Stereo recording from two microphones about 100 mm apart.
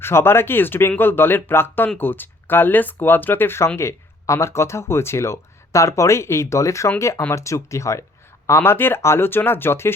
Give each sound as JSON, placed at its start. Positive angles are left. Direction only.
{"t": 0.0, "sound": "speech", "side_deg": 25}